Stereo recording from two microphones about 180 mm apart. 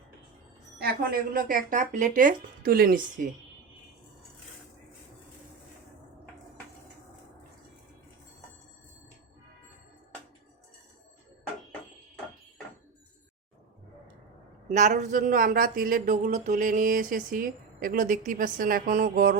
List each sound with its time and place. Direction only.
0.8 s speech: 55° right (ahead or behind)
14.7 s speech: 40° right (ahead or behind)